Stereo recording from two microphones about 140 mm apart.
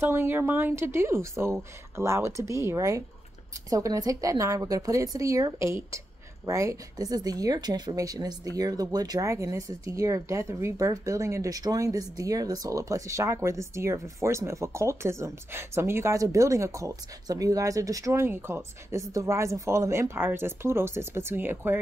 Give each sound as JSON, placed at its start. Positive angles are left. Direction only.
{"t": 0.0, "sound": "speech", "side_deg": -15}